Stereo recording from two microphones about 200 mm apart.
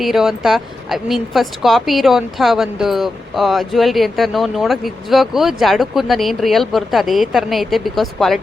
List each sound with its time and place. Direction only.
0.0 s speech: centre (ahead or behind)